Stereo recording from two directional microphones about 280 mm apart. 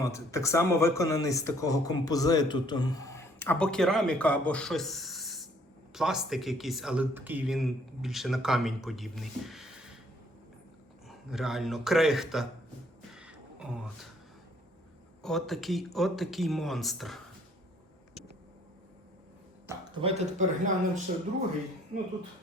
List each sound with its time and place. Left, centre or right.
0.0 s speech: centre
11.1 s speech: centre
13.1 s a sound: centre
15.2 s speech: centre
19.6 s speech: centre